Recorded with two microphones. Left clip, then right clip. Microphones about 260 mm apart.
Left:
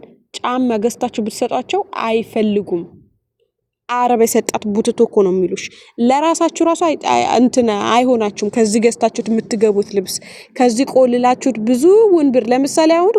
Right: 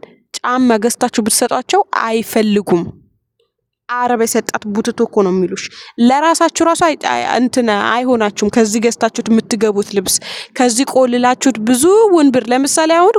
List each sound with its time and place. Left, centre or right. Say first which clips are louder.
0.3 s a sound: right 3 dB; right
0.7 s a woman's voice: right 4 dB; right
2.0 s a woman's voice: right 2 dB; right
3.8 s a woman's voice: left 1 dB; right
5.0 s a woman's voice: right 1 dB; right
5.5 s a woman's voice: even; centre